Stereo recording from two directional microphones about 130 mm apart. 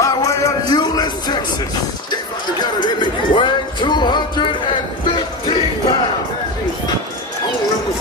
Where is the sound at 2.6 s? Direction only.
35° left (ahead or behind).